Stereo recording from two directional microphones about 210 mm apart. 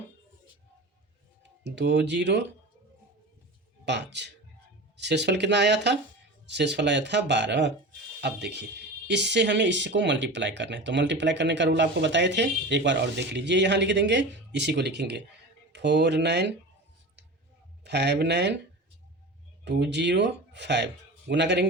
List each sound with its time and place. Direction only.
1.6 s speech: 55° right (ahead or behind)
3.8 s speech: 55° right (ahead or behind)
17.8 s speech: 55° right (ahead or behind)
19.6 s speech: 55° right (ahead or behind)